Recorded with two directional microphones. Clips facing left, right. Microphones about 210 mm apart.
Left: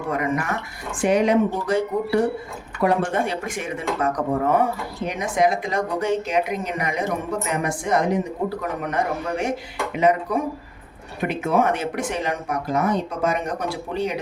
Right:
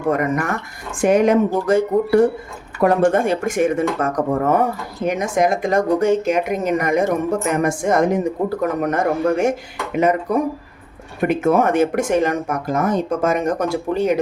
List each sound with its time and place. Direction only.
0.1 s speech: 45° right (ahead or behind)